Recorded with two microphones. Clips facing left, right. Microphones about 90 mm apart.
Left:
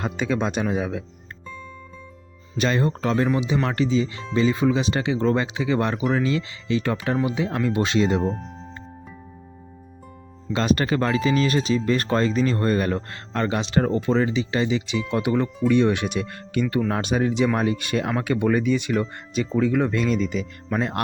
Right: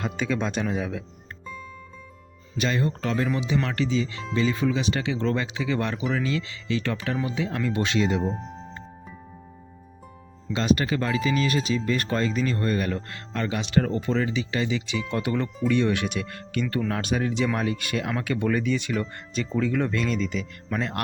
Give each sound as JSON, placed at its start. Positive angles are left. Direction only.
{"t": 0.0, "sound": "speech", "side_deg": 25}
{"t": 2.6, "sound": "speech", "side_deg": 40}
{"t": 8.2, "sound": "speech", "side_deg": -5}
{"t": 10.5, "sound": "speech", "side_deg": 50}
{"t": 13.6, "sound": "speech", "side_deg": 25}